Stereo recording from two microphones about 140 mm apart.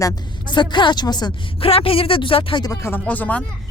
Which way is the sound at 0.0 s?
30° left (ahead or behind).